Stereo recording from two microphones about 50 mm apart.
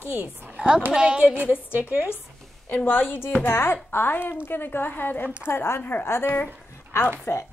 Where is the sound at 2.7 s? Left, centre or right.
Left.